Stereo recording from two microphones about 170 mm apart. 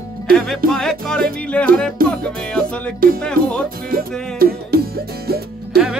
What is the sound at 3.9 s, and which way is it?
Music, 60° right (ahead or behind).